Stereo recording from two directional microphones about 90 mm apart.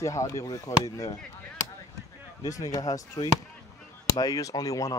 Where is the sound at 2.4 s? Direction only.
40° left (ahead or behind).